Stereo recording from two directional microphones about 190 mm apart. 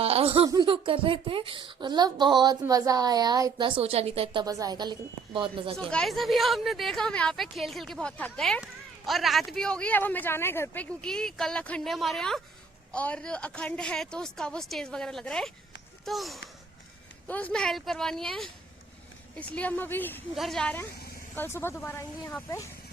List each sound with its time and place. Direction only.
0.0 s a sound: 30° right (ahead or behind)
0.4 s a woman's voice: 25° right (ahead or behind)
4.4 s a woman's voice: 20° right (ahead or behind)
5.7 s speech: 5° left (ahead or behind)